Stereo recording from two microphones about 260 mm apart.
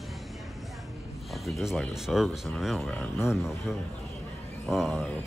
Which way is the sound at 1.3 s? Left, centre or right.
Centre.